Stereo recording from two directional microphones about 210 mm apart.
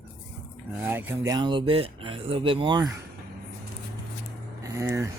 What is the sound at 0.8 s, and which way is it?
Speech, 10° right (ahead or behind).